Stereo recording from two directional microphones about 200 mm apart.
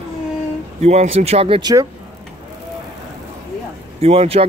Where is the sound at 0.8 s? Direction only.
30° right (ahead or behind).